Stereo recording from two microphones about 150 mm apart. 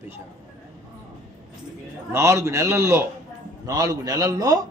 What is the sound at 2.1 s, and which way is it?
A man's voice, 20° right (ahead or behind).